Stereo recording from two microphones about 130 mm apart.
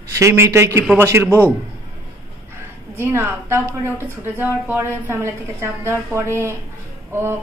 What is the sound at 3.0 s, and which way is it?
A woman's voice, 20° right (ahead or behind).